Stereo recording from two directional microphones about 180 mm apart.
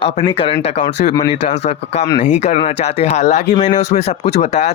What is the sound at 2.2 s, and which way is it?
Speech, 45° left (ahead or behind).